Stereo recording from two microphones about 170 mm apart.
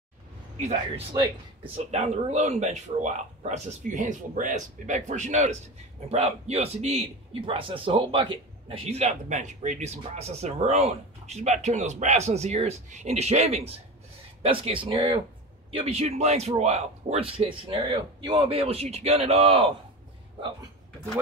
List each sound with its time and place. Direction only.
0.6 s a man's voice: 40° right (ahead or behind)